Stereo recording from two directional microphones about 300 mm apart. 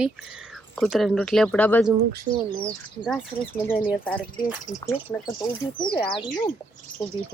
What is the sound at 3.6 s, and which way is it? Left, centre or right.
Speech, centre.